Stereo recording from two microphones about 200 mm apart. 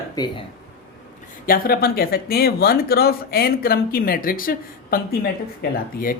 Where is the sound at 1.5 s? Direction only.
50° left (ahead or behind).